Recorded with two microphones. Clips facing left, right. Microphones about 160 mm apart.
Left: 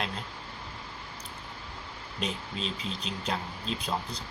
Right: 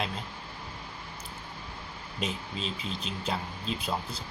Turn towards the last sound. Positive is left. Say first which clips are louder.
# even
turn(degrees=-5)  # may be behind; listen again after turning